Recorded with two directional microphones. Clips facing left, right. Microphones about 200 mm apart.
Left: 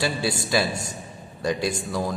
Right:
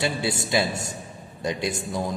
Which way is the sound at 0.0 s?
20° right (ahead or behind).